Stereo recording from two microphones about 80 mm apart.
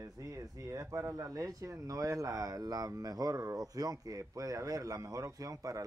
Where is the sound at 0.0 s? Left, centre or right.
Right.